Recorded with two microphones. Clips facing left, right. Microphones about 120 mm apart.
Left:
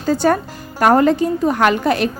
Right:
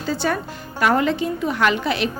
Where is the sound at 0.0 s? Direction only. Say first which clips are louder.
Left 7 dB; 45° left (ahead or behind).